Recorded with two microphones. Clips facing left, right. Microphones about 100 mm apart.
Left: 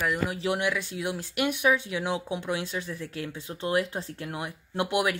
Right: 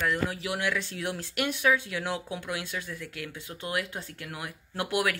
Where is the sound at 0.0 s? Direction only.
15° left (ahead or behind).